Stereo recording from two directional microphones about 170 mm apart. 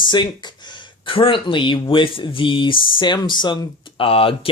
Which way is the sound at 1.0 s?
30° left (ahead or behind).